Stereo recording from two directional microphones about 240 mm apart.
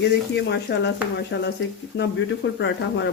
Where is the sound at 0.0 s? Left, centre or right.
Left.